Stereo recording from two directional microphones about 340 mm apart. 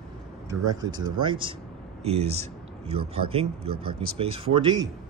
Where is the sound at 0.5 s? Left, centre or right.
Centre.